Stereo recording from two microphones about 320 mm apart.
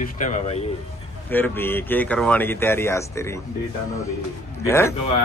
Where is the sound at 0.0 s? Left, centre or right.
Left.